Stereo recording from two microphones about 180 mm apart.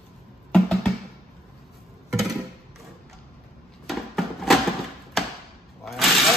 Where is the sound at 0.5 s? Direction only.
Centre (ahead or behind).